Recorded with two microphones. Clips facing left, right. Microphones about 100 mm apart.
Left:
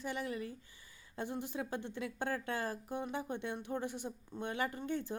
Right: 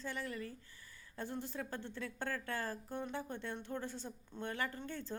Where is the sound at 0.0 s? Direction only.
15° left (ahead or behind).